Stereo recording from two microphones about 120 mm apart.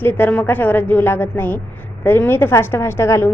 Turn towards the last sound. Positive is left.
turn(degrees=20)  # may be behind; listen again after turning